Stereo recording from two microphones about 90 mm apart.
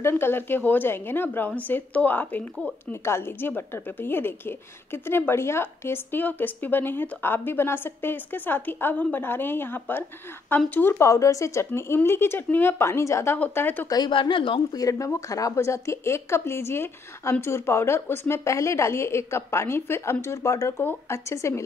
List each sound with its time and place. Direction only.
0.0 s a woman's voice: 25° left (ahead or behind)
11.1 s a woman's voice: 35° left (ahead or behind); by 13.8 s 20° left (ahead or behind)
13.8 s speech: 45° left (ahead or behind)
14.1 s speech: 70° left (ahead or behind)
14.7 s a woman's voice: 40° left (ahead or behind)